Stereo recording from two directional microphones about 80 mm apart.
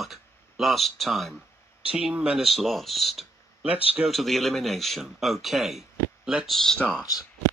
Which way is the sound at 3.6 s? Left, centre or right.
Centre.